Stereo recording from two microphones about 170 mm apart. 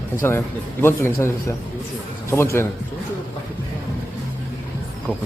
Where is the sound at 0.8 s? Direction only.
15° left (ahead or behind).